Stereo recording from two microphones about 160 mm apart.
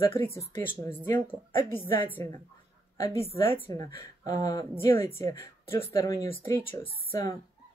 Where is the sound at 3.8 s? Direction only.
55° right (ahead or behind).